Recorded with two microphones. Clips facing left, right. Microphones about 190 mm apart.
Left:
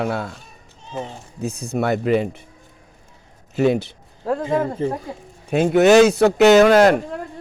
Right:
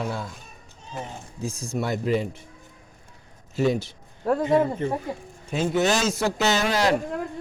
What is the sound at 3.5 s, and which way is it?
Speech, 65° left (ahead or behind).